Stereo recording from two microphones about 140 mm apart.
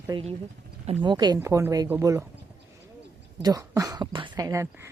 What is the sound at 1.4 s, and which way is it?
Speech, 15° right (ahead or behind).